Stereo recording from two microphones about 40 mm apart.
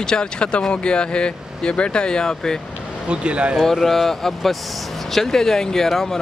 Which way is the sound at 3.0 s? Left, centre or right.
Right.